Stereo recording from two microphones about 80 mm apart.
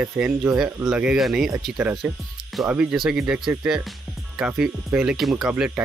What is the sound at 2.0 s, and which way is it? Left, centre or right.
Speech, centre.